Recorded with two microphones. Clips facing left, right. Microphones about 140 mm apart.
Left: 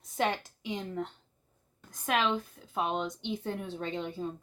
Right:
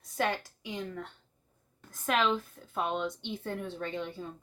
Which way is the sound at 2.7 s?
20° left (ahead or behind).